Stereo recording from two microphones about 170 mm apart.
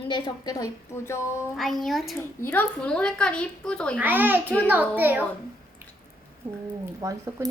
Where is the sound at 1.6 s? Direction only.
Centre (ahead or behind).